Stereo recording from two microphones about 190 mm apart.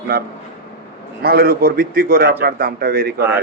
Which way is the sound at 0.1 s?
50° right (ahead or behind).